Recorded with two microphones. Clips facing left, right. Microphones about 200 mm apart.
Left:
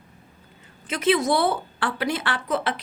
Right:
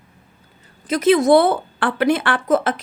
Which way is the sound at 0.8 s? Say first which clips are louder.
Right 7 dB; 40° right (ahead or behind).